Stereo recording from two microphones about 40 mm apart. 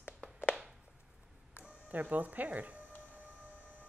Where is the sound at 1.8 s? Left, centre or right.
Right.